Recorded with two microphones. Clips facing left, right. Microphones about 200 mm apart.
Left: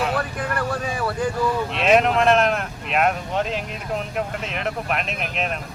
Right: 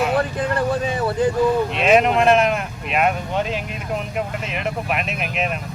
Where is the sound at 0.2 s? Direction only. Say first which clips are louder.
Right 5 dB; 20° right (ahead or behind).